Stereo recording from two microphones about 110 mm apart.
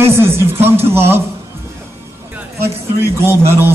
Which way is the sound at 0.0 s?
25° right (ahead or behind).